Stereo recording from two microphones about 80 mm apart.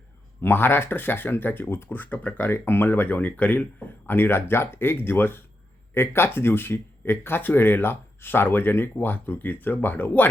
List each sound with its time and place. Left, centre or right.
0.4 s speech: left